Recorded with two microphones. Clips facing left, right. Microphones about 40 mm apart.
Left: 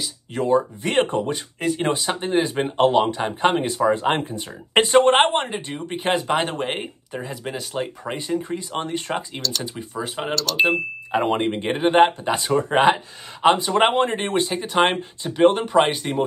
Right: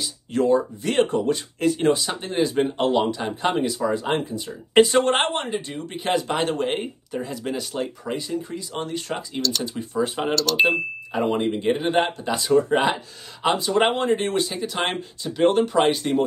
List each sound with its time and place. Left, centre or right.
0.0 s speech: centre
0.5 s speech: left
1.3 s speech: centre
1.8 s speech: left
8.0 s speech: left
9.4 s speech: centre
11.1 s speech: left; by 16.2 s centre